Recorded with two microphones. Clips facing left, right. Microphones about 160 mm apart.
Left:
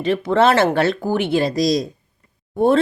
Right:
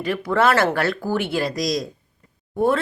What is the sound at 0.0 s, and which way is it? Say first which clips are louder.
Speech: left 4 dB; 25° left (ahead or behind).